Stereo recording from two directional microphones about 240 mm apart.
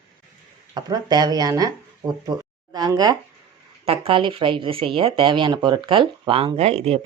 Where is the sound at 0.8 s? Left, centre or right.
Centre.